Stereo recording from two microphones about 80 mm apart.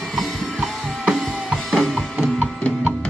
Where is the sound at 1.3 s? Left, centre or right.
Centre.